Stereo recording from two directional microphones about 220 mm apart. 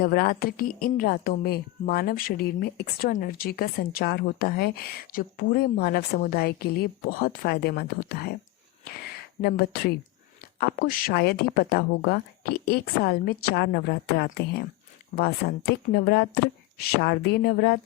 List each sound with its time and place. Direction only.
0.0 s a woman's voice: 40° left (ahead or behind)
9.4 s a woman's voice: 45° left (ahead or behind)